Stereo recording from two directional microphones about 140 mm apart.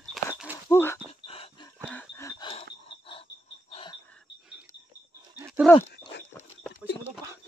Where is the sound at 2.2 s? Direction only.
25° left (ahead or behind).